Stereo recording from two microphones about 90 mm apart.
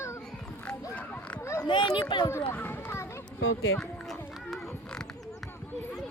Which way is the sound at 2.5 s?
25° left (ahead or behind).